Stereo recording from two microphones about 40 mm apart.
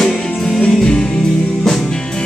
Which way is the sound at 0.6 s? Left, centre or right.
Centre.